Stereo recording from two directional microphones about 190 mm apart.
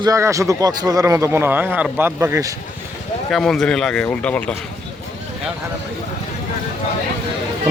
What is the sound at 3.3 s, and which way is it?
Speech, centre (ahead or behind).